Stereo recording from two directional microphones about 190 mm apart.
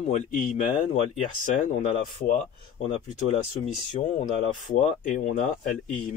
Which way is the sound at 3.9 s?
40° left (ahead or behind).